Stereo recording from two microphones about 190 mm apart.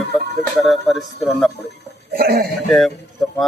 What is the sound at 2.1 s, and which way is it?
Speech, 55° right (ahead or behind).